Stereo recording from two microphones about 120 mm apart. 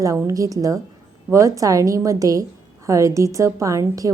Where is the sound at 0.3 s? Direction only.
30° right (ahead or behind).